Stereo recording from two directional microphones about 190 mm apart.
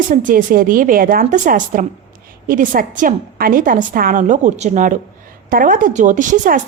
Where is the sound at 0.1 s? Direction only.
45° right (ahead or behind).